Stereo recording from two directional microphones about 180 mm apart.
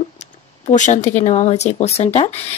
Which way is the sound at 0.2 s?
45° left (ahead or behind).